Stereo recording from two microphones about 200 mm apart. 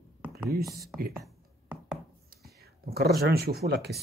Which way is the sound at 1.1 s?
Centre (ahead or behind).